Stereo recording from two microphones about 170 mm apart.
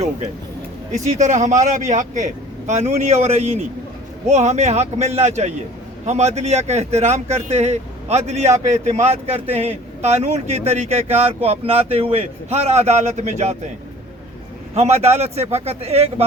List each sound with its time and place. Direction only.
0.9 s speech: 45° right (ahead or behind)
14.8 s speech: 40° right (ahead or behind)